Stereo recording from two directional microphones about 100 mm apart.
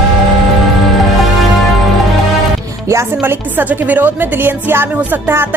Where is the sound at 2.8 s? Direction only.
30° right (ahead or behind).